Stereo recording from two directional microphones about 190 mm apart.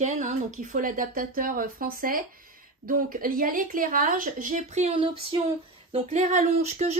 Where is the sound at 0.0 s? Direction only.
40° right (ahead or behind).